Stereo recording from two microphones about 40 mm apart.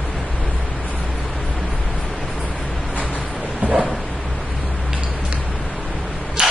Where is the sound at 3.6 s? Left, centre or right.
Right.